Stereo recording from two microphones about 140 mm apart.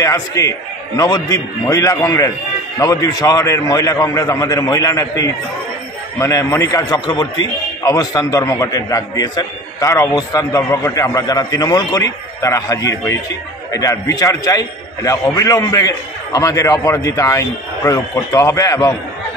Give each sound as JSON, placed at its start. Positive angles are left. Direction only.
{"t": 0.0, "sound": "a man's voice", "side_deg": 25}